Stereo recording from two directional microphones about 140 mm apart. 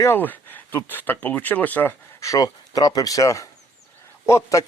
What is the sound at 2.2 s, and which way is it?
A man's voice, 25° left (ahead or behind).